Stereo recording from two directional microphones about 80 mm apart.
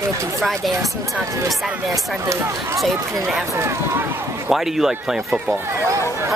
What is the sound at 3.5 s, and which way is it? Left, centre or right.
Speech, right.